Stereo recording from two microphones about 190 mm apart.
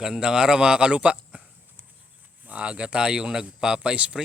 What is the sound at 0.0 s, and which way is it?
Speech, 5° right (ahead or behind).